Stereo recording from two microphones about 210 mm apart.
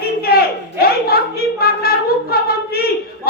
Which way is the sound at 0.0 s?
45° left (ahead or behind).